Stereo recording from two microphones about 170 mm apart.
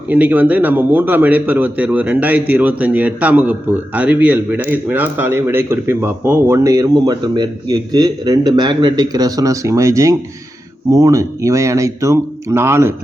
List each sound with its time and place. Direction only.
0.1 s a man's voice: 10° right (ahead or behind)